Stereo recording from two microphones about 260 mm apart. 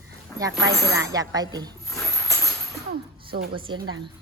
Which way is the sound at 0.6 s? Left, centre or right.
Centre.